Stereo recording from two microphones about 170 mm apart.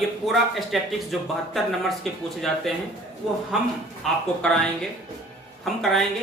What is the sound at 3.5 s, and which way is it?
Speech, 5° right (ahead or behind).